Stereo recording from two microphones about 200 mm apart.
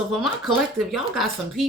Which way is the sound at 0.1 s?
Centre (ahead or behind).